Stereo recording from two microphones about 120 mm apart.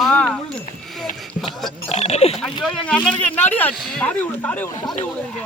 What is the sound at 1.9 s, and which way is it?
Speech, 65° left (ahead or behind).